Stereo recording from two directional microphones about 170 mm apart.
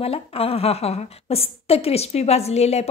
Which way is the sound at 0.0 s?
35° left (ahead or behind).